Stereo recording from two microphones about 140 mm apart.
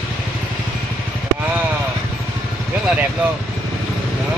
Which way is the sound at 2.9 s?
10° right (ahead or behind).